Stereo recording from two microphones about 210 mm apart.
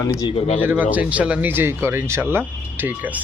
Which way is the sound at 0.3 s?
30° left (ahead or behind).